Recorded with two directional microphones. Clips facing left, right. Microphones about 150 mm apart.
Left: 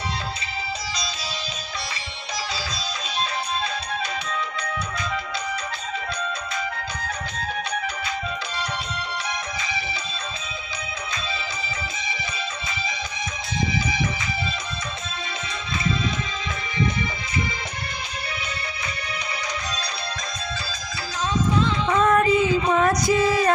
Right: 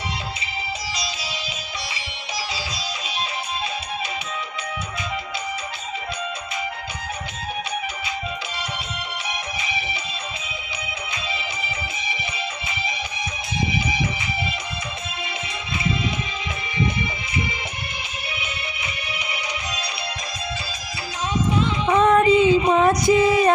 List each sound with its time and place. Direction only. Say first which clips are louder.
9.6 s music: right 1 dB; 15° right (ahead or behind)
18.3 s music: even; 10° right (ahead or behind)
21.8 s music: right 4 dB; 20° right (ahead or behind)